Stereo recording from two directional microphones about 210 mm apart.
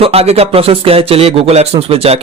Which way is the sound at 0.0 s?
30° right (ahead or behind).